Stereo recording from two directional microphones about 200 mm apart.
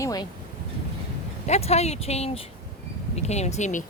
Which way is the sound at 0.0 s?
20° left (ahead or behind).